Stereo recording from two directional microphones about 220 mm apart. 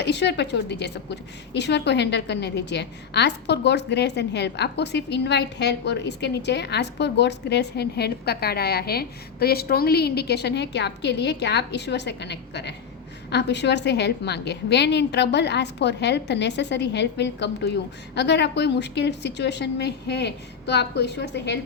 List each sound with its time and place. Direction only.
0.0 s a woman's voice: 50° left (ahead or behind)